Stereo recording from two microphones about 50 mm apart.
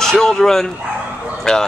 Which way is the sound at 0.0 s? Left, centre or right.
Centre.